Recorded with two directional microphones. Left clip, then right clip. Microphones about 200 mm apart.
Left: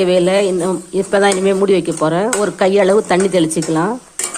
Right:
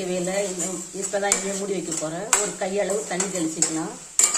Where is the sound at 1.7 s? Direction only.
60° left (ahead or behind).